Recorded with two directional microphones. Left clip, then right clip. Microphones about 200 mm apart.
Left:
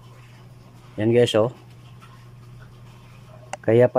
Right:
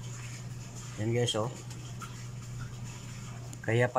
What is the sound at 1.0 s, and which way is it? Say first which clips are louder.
Speech: left 14 dB; 50° left (ahead or behind).